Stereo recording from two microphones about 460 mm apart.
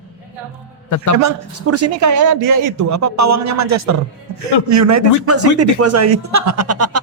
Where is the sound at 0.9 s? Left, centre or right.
Left.